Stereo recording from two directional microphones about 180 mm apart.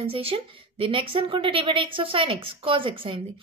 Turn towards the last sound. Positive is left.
turn(degrees=-30)  # may be behind; listen again after turning